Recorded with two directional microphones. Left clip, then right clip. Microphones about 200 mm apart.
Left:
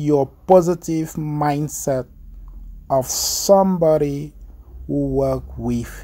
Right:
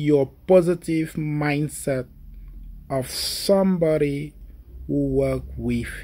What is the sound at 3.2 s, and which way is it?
Speech, 15° left (ahead or behind).